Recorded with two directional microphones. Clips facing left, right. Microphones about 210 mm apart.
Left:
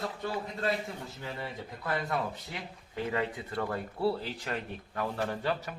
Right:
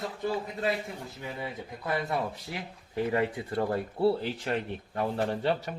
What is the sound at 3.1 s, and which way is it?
Speech, 25° right (ahead or behind).